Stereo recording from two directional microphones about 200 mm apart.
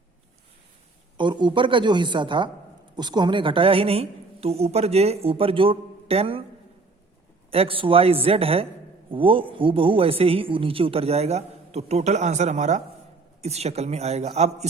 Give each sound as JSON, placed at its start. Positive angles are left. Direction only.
{"t": 1.1, "sound": "a man's voice", "side_deg": -25}
{"t": 7.5, "sound": "a man's voice", "side_deg": -25}